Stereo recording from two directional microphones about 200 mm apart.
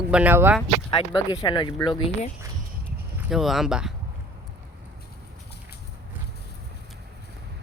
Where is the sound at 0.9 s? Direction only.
25° left (ahead or behind).